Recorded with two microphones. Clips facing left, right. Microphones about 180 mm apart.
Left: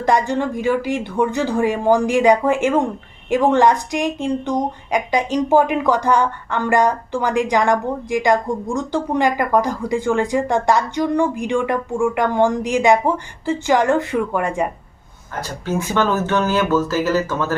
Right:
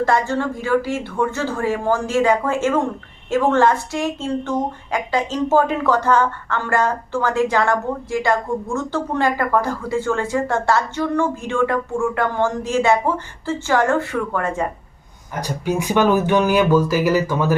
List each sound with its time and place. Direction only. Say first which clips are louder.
0.0 s speech: left 1 dB; 15° left (ahead or behind)
15.4 s speech: right 1 dB; 15° right (ahead or behind)